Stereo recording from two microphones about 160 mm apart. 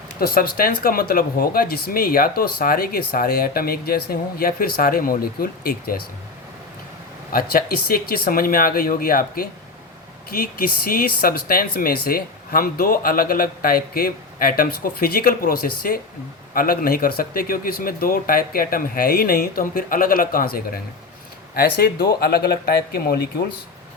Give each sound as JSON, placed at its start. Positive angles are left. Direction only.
{"t": 0.2, "sound": "speech", "side_deg": 65}
{"t": 7.3, "sound": "speech", "side_deg": 70}